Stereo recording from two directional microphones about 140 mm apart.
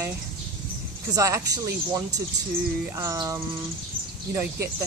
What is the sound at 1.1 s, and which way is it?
Speech, 25° right (ahead or behind).